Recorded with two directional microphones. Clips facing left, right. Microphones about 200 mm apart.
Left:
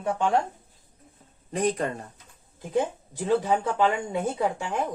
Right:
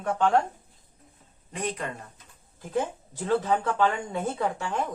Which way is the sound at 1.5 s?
40° left (ahead or behind).